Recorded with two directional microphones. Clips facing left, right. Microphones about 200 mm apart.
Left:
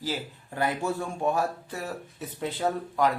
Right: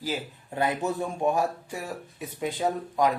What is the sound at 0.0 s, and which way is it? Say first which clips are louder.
Speech: right 1 dB; 20° right (ahead or behind).